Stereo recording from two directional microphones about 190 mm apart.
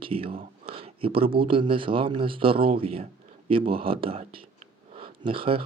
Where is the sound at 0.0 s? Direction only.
30° right (ahead or behind).